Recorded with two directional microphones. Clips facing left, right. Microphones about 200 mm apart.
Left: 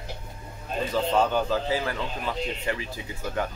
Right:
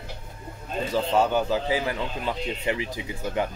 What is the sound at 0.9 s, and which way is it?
Speech, 10° right (ahead or behind).